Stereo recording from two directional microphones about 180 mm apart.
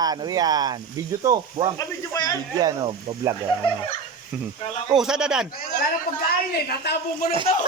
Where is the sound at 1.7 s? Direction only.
20° left (ahead or behind).